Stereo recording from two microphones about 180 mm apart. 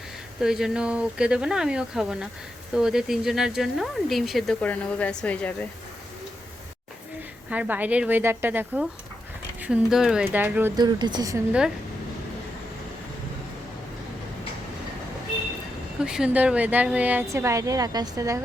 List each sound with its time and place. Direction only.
0.3 s speech: 5° right (ahead or behind)
7.5 s a woman's voice: 10° right (ahead or behind)
10.8 s speech: 25° right (ahead or behind)
16.0 s a woman's voice: 5° right (ahead or behind); by 18.3 s 20° right (ahead or behind)